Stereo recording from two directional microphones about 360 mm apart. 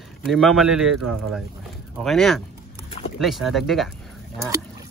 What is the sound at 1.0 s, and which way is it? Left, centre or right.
Speech, right.